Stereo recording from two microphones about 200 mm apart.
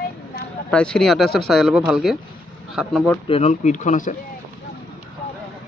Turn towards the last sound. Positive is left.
turn(degrees=40)  # may be behind; listen again after turning